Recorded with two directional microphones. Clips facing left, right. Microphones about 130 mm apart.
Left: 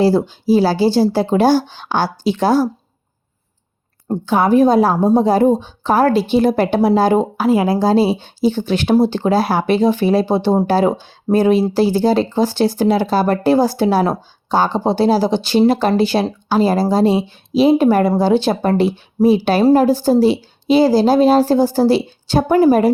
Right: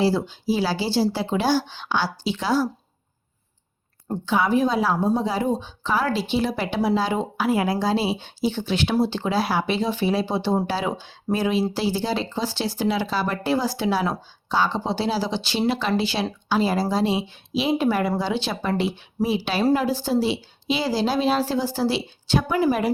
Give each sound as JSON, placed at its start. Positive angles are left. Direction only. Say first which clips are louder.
{"t": 0.0, "sound": "speech", "louder": "left 7 dB", "side_deg": 50}
{"t": 4.1, "sound": "speech", "louder": "left 7 dB", "side_deg": 50}
{"t": 7.4, "sound": "a woman's voice", "louder": "left 5 dB", "side_deg": 30}
{"t": 7.8, "sound": "speech", "louder": "left 9 dB", "side_deg": 40}